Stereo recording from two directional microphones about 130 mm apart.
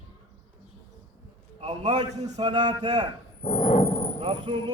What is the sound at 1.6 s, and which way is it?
A man's voice, 55° right (ahead or behind).